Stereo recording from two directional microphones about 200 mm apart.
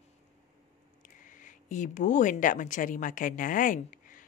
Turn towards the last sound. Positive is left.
turn(degrees=40)  # may be behind; listen again after turning